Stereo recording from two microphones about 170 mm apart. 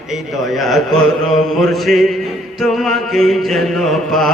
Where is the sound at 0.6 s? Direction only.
Centre (ahead or behind).